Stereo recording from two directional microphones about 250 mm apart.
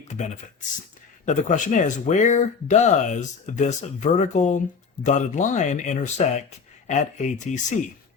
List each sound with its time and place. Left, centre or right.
1.2 s speech: left